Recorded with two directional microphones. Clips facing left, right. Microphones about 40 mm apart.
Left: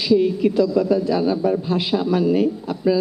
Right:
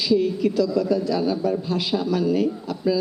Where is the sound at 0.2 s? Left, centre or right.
Left.